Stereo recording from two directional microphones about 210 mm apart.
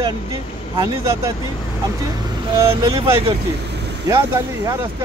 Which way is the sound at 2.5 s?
20° right (ahead or behind).